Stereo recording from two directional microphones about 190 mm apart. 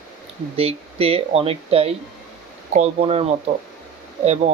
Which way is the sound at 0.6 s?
30° right (ahead or behind).